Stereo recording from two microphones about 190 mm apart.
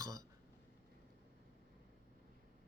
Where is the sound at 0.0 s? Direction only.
20° right (ahead or behind).